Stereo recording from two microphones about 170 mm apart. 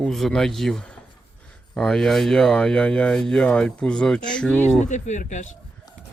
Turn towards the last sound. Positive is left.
turn(degrees=45)  # may be behind; listen again after turning